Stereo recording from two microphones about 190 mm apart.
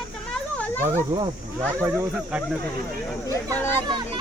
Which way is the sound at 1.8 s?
10° right (ahead or behind).